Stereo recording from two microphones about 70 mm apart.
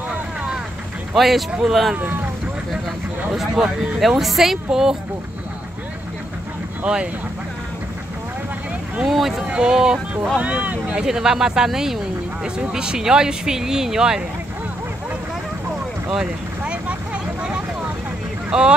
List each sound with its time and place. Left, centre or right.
1.1 s speech: centre
3.6 s speech: centre
6.8 s speech: centre
9.0 s speech: centre
10.4 s speech: right
11.1 s speech: centre
16.1 s vehicle: centre
18.5 s speech: centre